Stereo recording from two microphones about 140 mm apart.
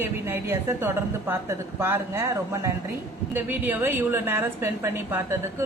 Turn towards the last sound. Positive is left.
turn(degrees=-20)  # may be behind; listen again after turning